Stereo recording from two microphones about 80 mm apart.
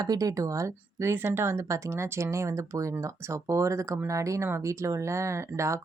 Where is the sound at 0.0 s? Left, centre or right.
Right.